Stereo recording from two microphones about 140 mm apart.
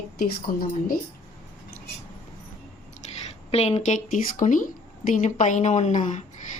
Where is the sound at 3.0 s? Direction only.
55° left (ahead or behind).